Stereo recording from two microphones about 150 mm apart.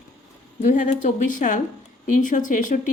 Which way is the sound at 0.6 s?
55° left (ahead or behind).